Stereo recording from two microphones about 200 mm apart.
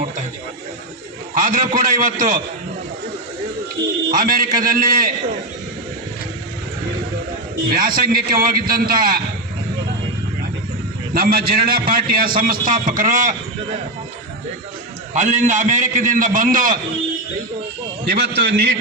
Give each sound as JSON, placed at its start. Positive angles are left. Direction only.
{"t": 1.4, "sound": "a man's voice", "side_deg": -40}
{"t": 3.8, "sound": "a man's voice", "side_deg": -25}
{"t": 4.1, "sound": "a man's voice", "side_deg": -45}
{"t": 7.7, "sound": "a man's voice", "side_deg": -45}
{"t": 11.1, "sound": "a man's voice", "side_deg": -50}
{"t": 15.1, "sound": "a man's voice", "side_deg": -35}
{"t": 18.1, "sound": "a man's voice", "side_deg": -55}